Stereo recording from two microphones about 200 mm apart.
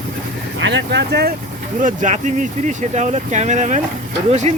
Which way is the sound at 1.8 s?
40° right (ahead or behind).